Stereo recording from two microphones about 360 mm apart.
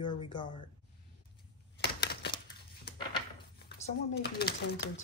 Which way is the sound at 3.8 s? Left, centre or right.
Left.